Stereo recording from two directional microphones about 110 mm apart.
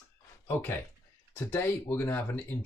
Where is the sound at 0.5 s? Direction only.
20° left (ahead or behind).